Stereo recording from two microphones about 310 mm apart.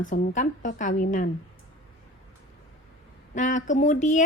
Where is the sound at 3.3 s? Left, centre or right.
Left.